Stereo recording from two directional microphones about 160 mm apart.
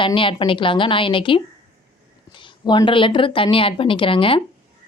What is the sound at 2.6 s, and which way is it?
Speech, 30° left (ahead or behind).